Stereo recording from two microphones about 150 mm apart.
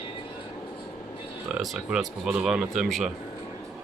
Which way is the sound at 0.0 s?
35° left (ahead or behind).